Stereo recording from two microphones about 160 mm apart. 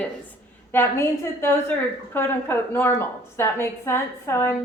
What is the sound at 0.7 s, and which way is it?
A woman's voice, 15° left (ahead or behind).